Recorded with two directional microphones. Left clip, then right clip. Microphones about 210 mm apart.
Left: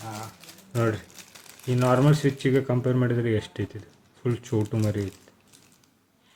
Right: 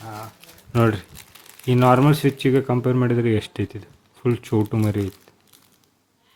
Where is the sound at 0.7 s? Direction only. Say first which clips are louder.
Right 6 dB; 45° right (ahead or behind); by 4.8 s 30° right (ahead or behind).